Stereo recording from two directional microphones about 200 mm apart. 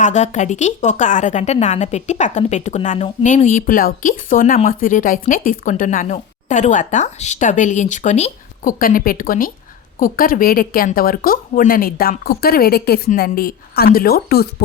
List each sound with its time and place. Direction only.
0.0 s a woman's voice: 35° left (ahead or behind)